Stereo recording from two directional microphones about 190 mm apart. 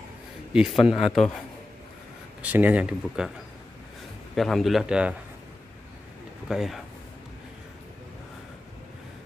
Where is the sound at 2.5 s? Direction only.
10° right (ahead or behind).